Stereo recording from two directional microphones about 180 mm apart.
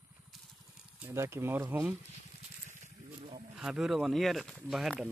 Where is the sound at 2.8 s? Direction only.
30° right (ahead or behind).